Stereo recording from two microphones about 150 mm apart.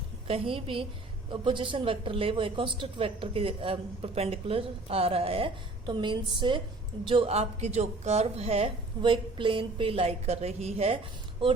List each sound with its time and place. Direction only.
0.3 s a woman's voice: 35° right (ahead or behind)